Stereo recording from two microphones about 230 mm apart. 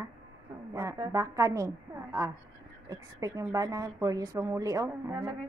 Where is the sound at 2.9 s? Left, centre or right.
Centre.